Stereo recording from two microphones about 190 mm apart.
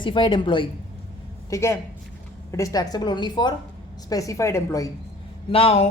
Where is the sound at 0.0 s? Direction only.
25° left (ahead or behind).